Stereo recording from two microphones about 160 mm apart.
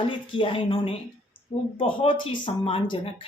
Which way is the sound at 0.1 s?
35° left (ahead or behind).